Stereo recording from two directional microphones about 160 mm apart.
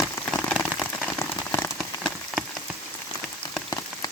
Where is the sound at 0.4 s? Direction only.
Centre (ahead or behind).